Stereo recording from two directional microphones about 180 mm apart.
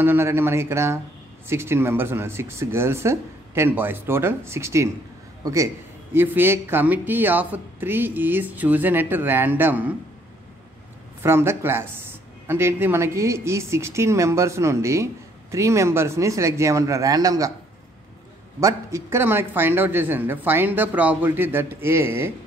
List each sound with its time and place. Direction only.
0.0 s a man's voice: 10° right (ahead or behind)
11.2 s speech: 15° right (ahead or behind)
18.6 s speech: 15° right (ahead or behind)